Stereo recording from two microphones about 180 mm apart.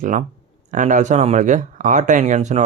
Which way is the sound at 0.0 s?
45° right (ahead or behind).